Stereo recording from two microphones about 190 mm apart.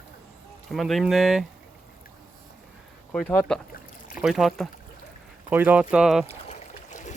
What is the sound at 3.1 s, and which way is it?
Speech, 5° left (ahead or behind).